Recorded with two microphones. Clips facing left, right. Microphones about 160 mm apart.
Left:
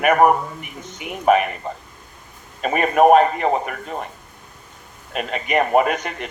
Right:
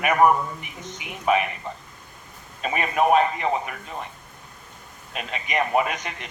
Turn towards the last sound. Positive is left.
turn(degrees=50)  # may be behind; listen again after turning